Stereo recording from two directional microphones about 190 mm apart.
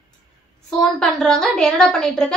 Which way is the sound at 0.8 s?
5° left (ahead or behind).